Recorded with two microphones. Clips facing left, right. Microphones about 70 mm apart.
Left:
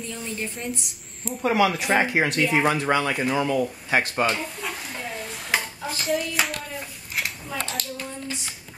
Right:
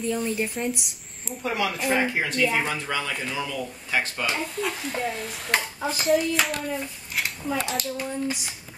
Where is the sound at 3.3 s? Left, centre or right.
Left.